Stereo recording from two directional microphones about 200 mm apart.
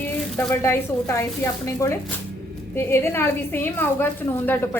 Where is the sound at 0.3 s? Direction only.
10° left (ahead or behind).